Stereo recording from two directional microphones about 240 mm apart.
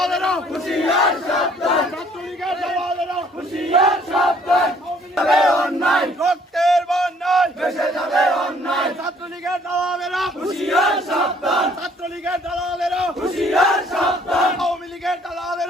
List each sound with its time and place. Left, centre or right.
0.0 s battle cry: centre
2.4 s a sound: centre
3.9 s crowd: centre
5.1 s battle cry: centre
9.4 s chant: centre